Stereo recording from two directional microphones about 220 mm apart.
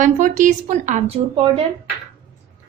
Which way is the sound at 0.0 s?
35° right (ahead or behind).